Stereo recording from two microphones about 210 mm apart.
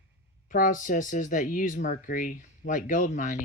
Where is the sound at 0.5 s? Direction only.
40° left (ahead or behind).